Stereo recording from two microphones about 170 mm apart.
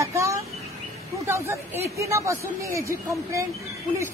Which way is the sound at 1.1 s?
15° right (ahead or behind).